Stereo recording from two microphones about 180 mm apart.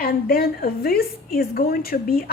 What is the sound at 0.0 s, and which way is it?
A woman's voice, 55° left (ahead or behind).